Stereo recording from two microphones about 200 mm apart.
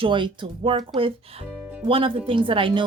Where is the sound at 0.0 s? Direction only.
25° right (ahead or behind).